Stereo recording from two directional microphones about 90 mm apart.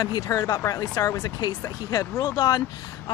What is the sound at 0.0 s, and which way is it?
Speech, 45° left (ahead or behind).